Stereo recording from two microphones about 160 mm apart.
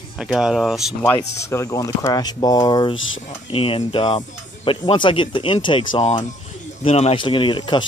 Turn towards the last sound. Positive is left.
turn(degrees=30)  # may be behind; listen again after turning